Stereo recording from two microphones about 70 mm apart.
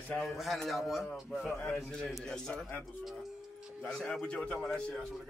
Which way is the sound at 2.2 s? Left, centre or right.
Centre.